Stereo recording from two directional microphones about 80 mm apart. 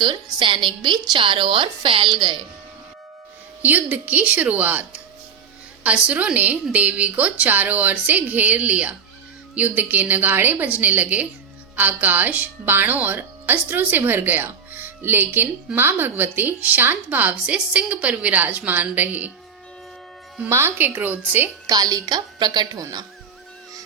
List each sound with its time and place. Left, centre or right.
0.0 s a woman's voice: right
3.6 s a woman's voice: right
20.5 s a woman's voice: right
21.7 s a woman's voice: right